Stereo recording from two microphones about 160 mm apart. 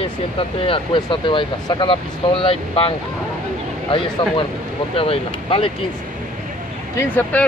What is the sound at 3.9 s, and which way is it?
Speech, 30° left (ahead or behind).